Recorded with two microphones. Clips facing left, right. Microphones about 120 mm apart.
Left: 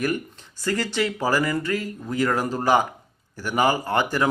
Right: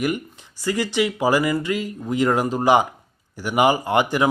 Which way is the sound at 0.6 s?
15° right (ahead or behind).